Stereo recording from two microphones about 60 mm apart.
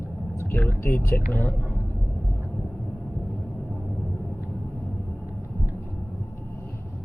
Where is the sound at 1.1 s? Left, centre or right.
Left.